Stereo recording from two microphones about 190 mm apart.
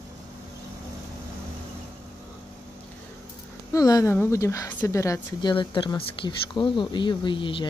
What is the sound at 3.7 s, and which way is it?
Speech, 20° left (ahead or behind).